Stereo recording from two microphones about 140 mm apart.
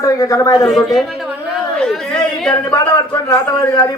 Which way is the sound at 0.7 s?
Centre (ahead or behind).